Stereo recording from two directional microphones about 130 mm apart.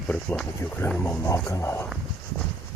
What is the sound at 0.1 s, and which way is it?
Speech, 10° left (ahead or behind).